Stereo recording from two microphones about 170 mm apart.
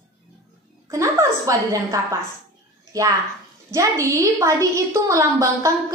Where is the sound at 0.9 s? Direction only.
20° right (ahead or behind).